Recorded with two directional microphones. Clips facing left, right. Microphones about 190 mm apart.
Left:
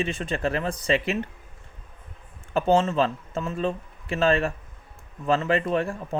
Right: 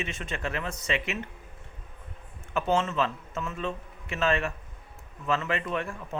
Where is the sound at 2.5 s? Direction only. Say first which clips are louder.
Left 6 dB; 30° left (ahead or behind).